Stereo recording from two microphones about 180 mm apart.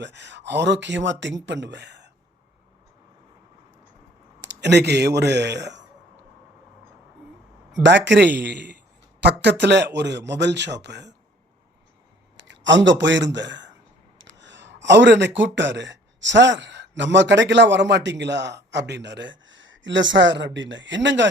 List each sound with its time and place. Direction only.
0.0 s speech: 75° right (ahead or behind)
4.4 s speech: 75° right (ahead or behind)
7.7 s speech: 80° right
12.5 s a man's voice: 90° right
14.2 s a sound: 90° right
15.4 s speech: 90° right